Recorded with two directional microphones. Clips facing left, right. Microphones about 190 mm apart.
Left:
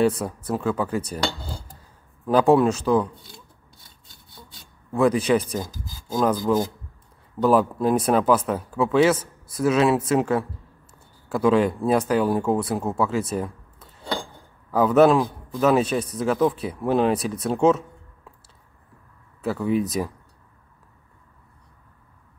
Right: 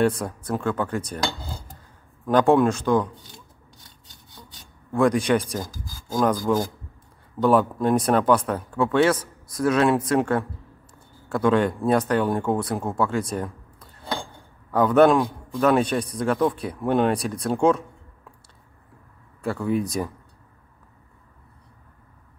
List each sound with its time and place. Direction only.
0.2 s speech: 5° left (ahead or behind)
2.2 s speech: 5° left (ahead or behind)
4.9 s a man's voice: 5° left (ahead or behind)
19.4 s a man's voice: 5° left (ahead or behind)